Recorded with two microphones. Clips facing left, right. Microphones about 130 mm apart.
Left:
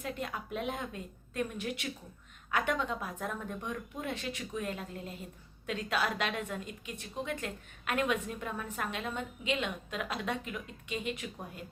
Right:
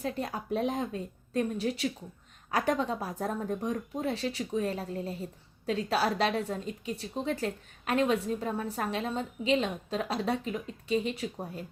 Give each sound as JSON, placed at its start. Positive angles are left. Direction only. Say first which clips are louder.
{"t": 0.0, "sound": "a woman's voice", "louder": "right 4 dB", "side_deg": -35}